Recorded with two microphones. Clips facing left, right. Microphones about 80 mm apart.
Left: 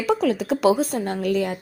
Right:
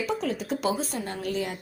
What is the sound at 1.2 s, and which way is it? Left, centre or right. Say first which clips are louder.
Speech: left 7 dB; left.